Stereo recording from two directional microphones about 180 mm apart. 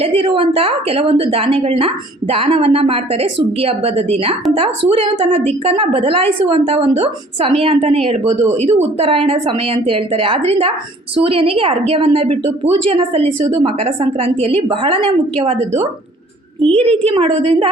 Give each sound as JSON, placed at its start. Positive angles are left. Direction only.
{"t": 0.0, "sound": "a woman's voice", "side_deg": -30}
{"t": 16.6, "sound": "a woman's voice", "side_deg": -30}